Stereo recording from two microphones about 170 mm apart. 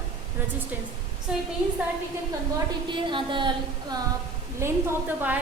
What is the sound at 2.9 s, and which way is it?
Speech, 30° right (ahead or behind).